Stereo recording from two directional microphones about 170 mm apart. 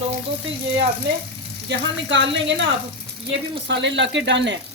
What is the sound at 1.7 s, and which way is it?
Speech, 90° right.